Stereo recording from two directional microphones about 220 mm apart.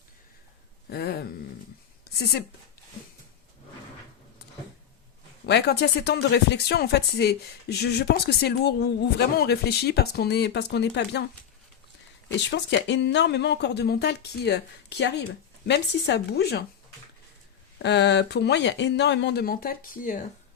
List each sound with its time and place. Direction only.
0.9 s a sound: 45° left (ahead or behind)
5.5 s speech: 50° left (ahead or behind)
12.5 s speech: 55° left (ahead or behind)
17.8 s speech: 50° left (ahead or behind)